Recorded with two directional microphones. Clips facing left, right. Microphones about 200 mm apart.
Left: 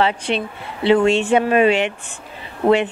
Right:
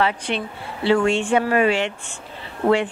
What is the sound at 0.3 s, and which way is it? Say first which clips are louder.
Speech: left 3 dB; 20° left (ahead or behind).